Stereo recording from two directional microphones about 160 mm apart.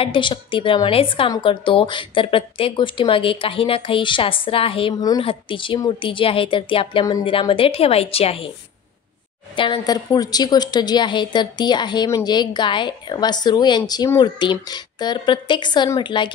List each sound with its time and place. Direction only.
0.0 s speech: 30° left (ahead or behind)
9.6 s a woman's voice: 25° left (ahead or behind)